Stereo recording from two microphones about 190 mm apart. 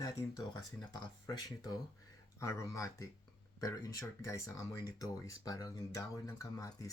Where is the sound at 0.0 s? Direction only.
20° left (ahead or behind).